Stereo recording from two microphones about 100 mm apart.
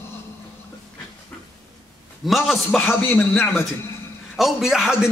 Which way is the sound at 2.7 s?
15° left (ahead or behind).